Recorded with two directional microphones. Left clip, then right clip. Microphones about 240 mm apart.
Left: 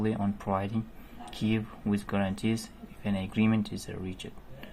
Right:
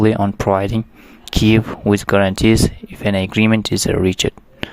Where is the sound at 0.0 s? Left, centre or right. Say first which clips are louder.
Right 17 dB; right.